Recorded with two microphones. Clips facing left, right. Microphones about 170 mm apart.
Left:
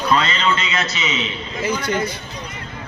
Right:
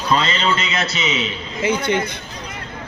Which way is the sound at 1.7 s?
25° right (ahead or behind).